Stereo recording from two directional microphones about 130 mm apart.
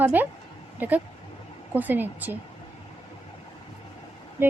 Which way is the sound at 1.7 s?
15° right (ahead or behind).